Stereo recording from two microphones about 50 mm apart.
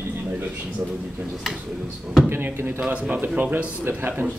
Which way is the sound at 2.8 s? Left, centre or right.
Right.